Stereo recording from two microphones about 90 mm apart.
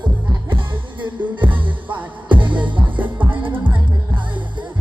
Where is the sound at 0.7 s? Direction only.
65° right (ahead or behind).